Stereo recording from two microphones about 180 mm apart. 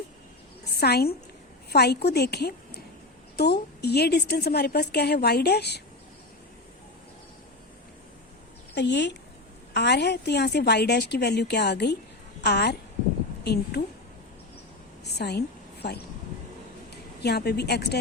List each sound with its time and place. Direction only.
0.6 s a sound: 60° left (ahead or behind)
1.7 s a woman's voice: 65° left (ahead or behind)
8.7 s a woman's voice: 75° left (ahead or behind)
15.0 s a woman's voice: 65° left (ahead or behind)